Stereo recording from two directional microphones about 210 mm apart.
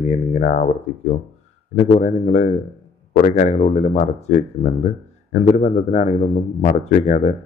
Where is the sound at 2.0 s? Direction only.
30° left (ahead or behind).